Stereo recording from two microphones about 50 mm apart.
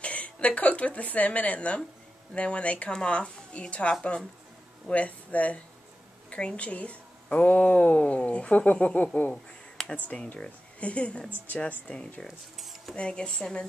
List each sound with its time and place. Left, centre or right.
0.0 s speech: left
9.8 s a sound: centre
10.3 s speech: left
12.3 s speech: centre
12.9 s a woman's voice: centre